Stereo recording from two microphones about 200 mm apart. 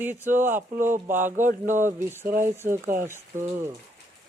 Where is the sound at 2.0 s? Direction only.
10° right (ahead or behind).